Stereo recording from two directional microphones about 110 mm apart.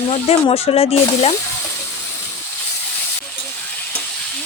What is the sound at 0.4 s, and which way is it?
Speech, 65° left (ahead or behind).